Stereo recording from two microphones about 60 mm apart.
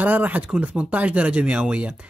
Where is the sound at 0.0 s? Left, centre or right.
Right.